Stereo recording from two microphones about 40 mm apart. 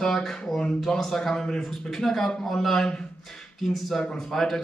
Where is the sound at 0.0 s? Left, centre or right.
Centre.